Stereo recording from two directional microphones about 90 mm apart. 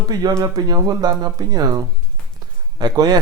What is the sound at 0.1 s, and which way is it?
Speech, 45° right (ahead or behind).